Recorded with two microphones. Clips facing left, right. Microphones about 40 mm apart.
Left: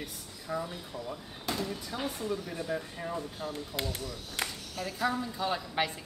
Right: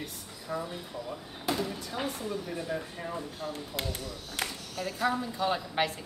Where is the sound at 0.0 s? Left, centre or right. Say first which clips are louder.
Right 1 dB; centre.